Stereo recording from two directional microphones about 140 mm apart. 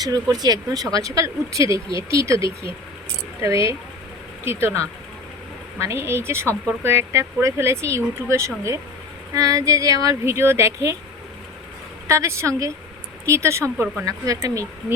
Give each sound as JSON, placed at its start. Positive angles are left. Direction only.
{"t": 0.0, "sound": "a woman's voice", "side_deg": -30}
{"t": 12.0, "sound": "speech", "side_deg": -20}